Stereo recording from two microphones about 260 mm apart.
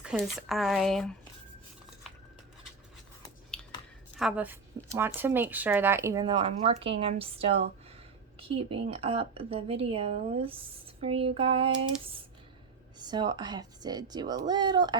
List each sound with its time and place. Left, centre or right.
0.0 s speech: centre
3.5 s a sound: centre
4.2 s a woman's voice: centre